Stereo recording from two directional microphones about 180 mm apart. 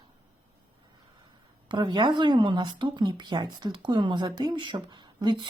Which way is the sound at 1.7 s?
25° right (ahead or behind).